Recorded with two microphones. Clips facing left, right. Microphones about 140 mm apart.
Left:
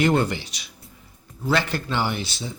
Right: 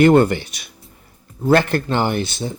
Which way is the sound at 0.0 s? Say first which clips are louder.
Right 8 dB; 55° right (ahead or behind).